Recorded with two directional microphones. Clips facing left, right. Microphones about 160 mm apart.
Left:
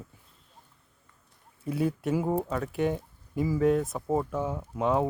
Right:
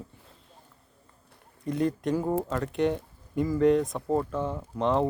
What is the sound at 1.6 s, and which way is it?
A man's voice, 5° left (ahead or behind).